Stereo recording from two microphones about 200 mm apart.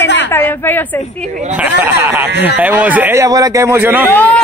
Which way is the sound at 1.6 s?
10° right (ahead or behind).